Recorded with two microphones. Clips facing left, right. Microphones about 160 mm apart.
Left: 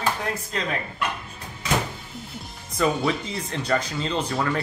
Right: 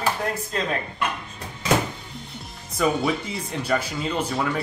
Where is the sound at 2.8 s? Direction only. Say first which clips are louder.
Right 1 dB; centre (ahead or behind).